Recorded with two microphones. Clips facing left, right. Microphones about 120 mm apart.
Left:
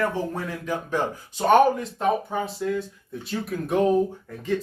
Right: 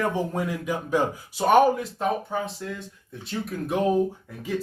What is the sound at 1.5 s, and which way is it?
Speech, centre (ahead or behind).